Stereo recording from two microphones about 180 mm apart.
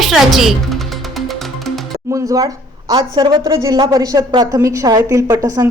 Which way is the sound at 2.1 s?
20° right (ahead or behind).